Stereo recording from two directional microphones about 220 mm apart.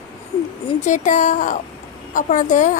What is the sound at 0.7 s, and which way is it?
A woman's voice, 35° left (ahead or behind).